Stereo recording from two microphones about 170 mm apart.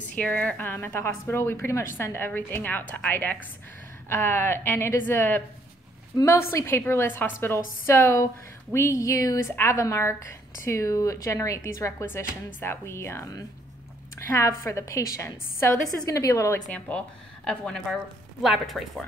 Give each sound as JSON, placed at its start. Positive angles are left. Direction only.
{"t": 0.1, "sound": "a woman's voice", "side_deg": 10}